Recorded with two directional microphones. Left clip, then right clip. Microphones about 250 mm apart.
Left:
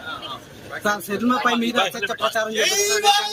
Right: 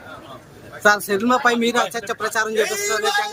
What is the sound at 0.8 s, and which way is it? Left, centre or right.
Speech, centre.